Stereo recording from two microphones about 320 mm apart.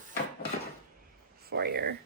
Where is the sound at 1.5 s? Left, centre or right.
Right.